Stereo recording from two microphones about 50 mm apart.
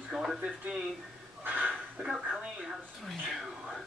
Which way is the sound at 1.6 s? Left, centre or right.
Centre.